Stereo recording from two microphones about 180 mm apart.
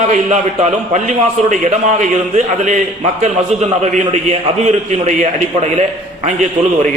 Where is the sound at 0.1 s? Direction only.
45° right (ahead or behind).